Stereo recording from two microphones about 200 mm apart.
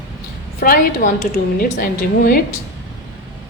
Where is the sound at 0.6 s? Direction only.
45° left (ahead or behind).